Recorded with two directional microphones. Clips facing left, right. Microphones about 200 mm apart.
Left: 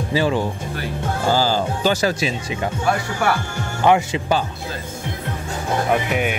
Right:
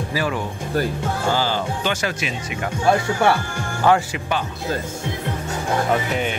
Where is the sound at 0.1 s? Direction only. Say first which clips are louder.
Left 6 dB; 25° left (ahead or behind).